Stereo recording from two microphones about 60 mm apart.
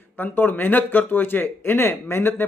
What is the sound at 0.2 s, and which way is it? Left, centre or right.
Speech, left.